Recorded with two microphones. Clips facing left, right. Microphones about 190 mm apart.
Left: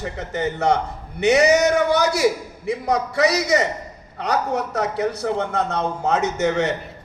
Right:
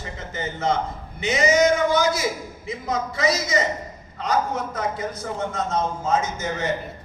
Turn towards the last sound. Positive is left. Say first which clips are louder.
# left 6 dB
turn(degrees=70)  # may be behind; listen again after turning